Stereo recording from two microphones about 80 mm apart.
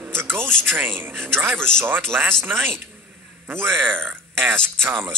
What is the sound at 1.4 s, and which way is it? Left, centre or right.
Speech, centre.